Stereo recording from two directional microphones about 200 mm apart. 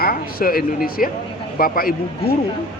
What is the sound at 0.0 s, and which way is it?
Speech, 45° left (ahead or behind).